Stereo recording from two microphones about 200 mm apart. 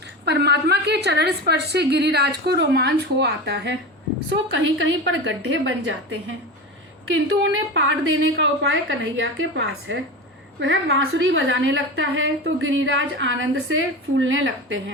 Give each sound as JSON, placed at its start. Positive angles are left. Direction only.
{"t": 0.3, "sound": "a woman's voice", "side_deg": -55}
{"t": 7.5, "sound": "a woman's voice", "side_deg": -70}